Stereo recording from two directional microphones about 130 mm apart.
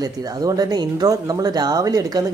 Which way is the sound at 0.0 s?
30° right (ahead or behind).